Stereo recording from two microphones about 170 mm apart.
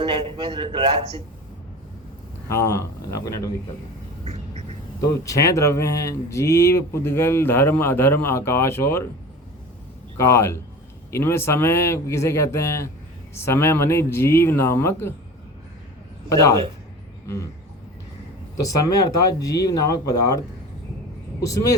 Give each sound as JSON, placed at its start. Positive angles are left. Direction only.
{"t": 0.0, "sound": "a man's voice", "side_deg": -30}
{"t": 2.5, "sound": "speech", "side_deg": 15}
{"t": 4.2, "sound": "duck", "side_deg": -40}
{"t": 4.9, "sound": "speech", "side_deg": 20}
{"t": 10.2, "sound": "speech", "side_deg": 15}
{"t": 16.3, "sound": "speech", "side_deg": 20}
{"t": 18.6, "sound": "speech", "side_deg": 20}
{"t": 21.4, "sound": "speech", "side_deg": 20}